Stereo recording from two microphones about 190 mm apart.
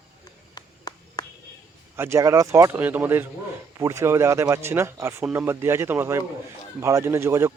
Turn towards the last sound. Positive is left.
turn(degrees=-15)  # may be behind; listen again after turning